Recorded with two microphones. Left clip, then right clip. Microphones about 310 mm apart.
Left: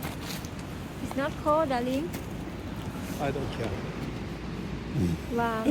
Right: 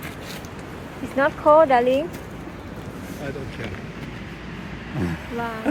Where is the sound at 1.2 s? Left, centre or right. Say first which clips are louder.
Right 11 dB; right.